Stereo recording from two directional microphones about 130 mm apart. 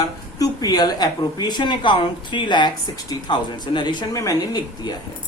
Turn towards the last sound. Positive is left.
turn(degrees=35)  # may be behind; listen again after turning